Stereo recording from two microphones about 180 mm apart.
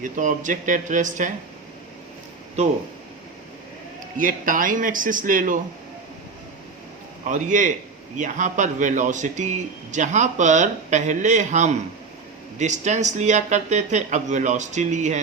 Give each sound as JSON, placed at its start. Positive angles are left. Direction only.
{"t": 0.0, "sound": "a man's voice", "side_deg": -45}
{"t": 2.6, "sound": "speech", "side_deg": -40}
{"t": 4.2, "sound": "a man's voice", "side_deg": -50}
{"t": 7.3, "sound": "a man's voice", "side_deg": -45}